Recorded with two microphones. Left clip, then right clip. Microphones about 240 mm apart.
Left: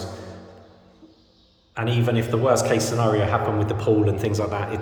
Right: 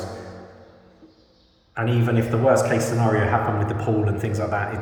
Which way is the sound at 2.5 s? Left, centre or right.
Centre.